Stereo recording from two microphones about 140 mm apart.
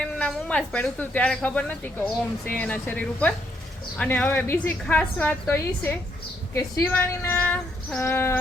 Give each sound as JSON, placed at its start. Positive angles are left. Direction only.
{"t": 0.0, "sound": "a woman's voice", "side_deg": 10}
{"t": 6.9, "sound": "child singing", "side_deg": 10}
{"t": 8.0, "sound": "a woman's voice", "side_deg": 15}